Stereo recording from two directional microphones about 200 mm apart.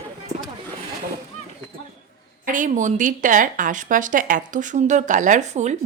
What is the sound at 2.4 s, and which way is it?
Speech, 40° right (ahead or behind).